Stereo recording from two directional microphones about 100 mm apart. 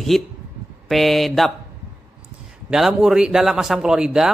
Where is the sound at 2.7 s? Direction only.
5° right (ahead or behind).